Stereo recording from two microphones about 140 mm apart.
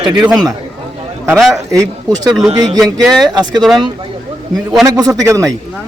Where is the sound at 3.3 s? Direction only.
30° right (ahead or behind).